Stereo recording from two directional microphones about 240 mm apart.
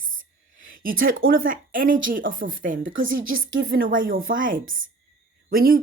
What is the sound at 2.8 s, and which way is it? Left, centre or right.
Speech, right.